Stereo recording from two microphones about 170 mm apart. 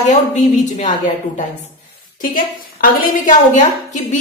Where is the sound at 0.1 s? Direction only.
45° left (ahead or behind).